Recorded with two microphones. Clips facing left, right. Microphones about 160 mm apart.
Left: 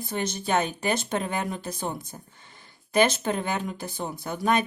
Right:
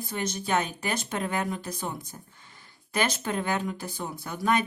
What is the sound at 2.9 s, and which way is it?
Speech, 20° left (ahead or behind).